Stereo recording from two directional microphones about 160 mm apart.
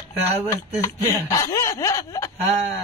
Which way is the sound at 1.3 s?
20° left (ahead or behind).